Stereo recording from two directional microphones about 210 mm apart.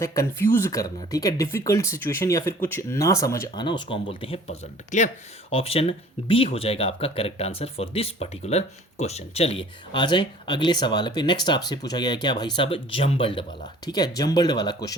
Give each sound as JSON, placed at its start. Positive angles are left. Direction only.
{"t": 0.0, "sound": "speech", "side_deg": 15}